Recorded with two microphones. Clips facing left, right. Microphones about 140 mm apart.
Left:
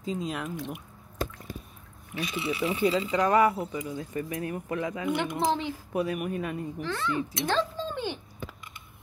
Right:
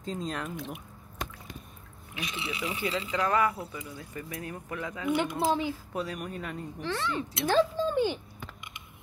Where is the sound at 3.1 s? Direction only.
15° left (ahead or behind).